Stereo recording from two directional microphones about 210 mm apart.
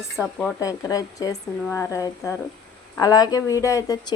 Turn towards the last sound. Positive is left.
turn(degrees=20)  # may be behind; listen again after turning